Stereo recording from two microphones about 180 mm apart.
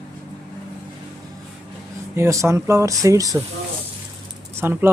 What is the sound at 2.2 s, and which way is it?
Speech, 15° right (ahead or behind).